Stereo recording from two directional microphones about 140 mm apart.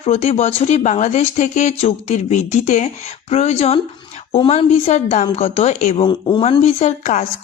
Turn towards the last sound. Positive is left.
turn(degrees=55)  # may be behind; listen again after turning